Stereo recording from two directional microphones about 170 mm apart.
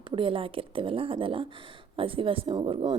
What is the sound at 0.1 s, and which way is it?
A woman's voice, 30° right (ahead or behind).